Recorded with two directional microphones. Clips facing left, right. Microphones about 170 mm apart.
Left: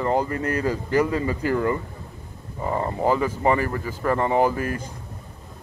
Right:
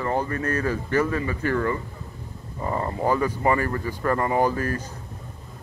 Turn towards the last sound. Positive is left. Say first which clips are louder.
# left 1 dB
turn(degrees=10)  # may be behind; listen again after turning